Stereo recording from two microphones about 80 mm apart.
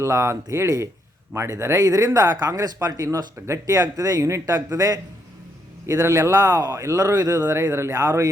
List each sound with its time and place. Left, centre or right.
0.0 s speech: right
7.5 s speech: right